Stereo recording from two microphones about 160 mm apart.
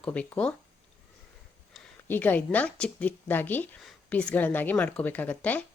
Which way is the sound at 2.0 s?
10° left (ahead or behind).